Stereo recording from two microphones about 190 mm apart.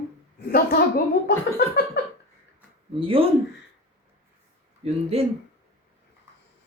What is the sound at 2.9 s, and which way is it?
Speech, 30° right (ahead or behind).